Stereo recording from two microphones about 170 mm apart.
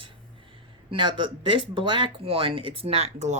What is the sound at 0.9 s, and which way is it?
Speech, 30° right (ahead or behind).